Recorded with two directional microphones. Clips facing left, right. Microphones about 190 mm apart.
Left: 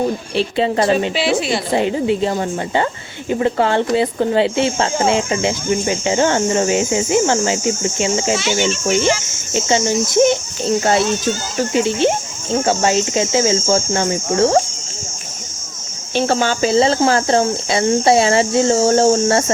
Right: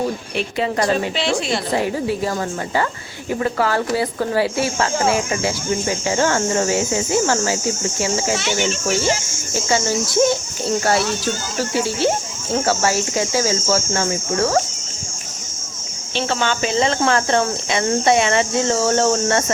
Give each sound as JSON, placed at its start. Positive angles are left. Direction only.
{"t": 0.3, "sound": "speech", "side_deg": 25}
{"t": 1.1, "sound": "speech", "side_deg": 5}
{"t": 1.7, "sound": "speech", "side_deg": 20}
{"t": 16.1, "sound": "speech", "side_deg": 40}